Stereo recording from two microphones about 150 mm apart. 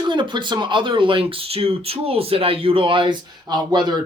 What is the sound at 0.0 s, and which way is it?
Speech, 30° right (ahead or behind).